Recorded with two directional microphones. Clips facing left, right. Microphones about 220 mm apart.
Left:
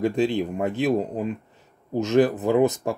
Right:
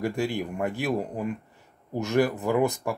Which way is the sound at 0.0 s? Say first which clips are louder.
Left 5 dB; 20° left (ahead or behind).